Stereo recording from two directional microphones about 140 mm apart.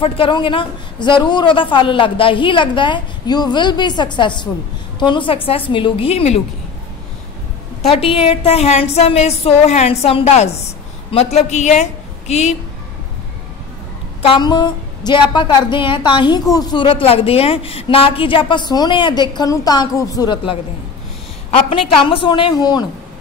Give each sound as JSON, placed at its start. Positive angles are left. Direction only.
{"t": 0.0, "sound": "a woman's voice", "side_deg": 40}
{"t": 7.8, "sound": "a woman's voice", "side_deg": 40}
{"t": 14.2, "sound": "a woman's voice", "side_deg": 35}
{"t": 21.5, "sound": "a woman's voice", "side_deg": 45}